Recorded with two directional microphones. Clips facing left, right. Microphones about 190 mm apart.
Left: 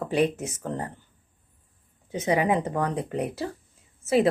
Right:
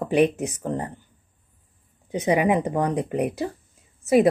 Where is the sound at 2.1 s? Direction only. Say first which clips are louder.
Right 3 dB; 15° right (ahead or behind).